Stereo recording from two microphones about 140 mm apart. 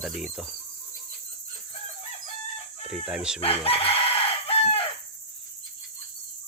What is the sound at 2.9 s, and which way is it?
Speech, 5° right (ahead or behind).